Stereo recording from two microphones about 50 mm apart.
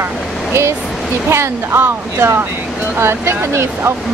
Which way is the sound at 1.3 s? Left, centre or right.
Right.